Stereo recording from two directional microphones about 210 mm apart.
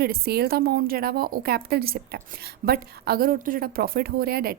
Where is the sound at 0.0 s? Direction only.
50° right (ahead or behind).